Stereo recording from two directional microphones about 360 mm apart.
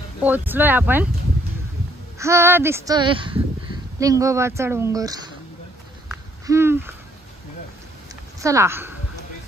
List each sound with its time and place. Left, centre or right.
0.2 s speech: centre
2.1 s speech: centre
6.0 s owl: centre
8.4 s a woman's voice: centre